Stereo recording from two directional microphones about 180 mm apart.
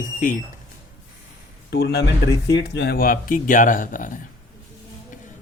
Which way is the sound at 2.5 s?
85° left.